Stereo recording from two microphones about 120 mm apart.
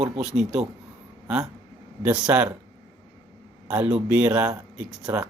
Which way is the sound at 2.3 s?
15° right (ahead or behind).